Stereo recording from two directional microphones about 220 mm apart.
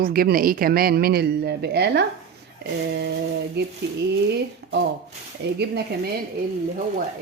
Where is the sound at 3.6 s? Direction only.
50° right (ahead or behind).